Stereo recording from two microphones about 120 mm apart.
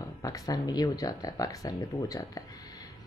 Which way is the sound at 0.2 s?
30° left (ahead or behind).